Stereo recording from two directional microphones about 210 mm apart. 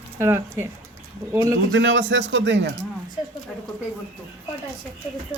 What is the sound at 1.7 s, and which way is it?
Speech, 60° right (ahead or behind).